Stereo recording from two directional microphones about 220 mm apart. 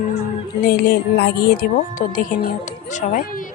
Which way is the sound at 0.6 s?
45° left (ahead or behind).